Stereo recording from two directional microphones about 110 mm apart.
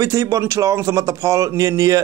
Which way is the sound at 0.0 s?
30° right (ahead or behind).